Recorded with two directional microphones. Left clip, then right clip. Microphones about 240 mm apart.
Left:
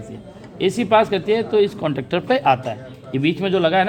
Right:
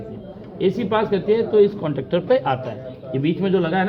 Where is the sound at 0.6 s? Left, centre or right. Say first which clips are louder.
Left 4 dB; left.